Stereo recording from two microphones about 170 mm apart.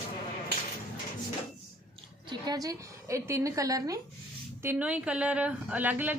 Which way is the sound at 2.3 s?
25° right (ahead or behind).